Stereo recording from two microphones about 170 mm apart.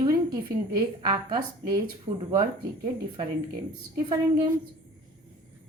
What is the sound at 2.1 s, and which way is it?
Speech, 50° right (ahead or behind).